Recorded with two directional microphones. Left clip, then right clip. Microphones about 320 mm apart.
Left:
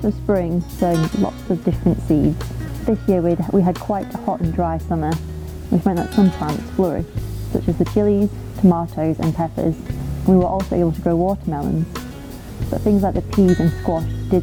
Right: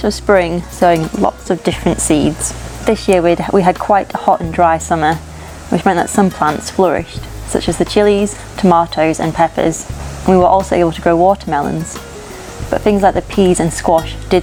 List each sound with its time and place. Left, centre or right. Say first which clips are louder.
0.0 s speech: right 9 dB; centre
13.0 s speech: right 8 dB; centre